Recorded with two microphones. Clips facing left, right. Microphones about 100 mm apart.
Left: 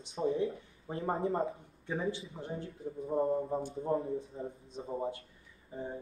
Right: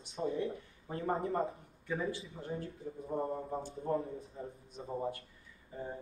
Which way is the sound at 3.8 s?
20° left (ahead or behind).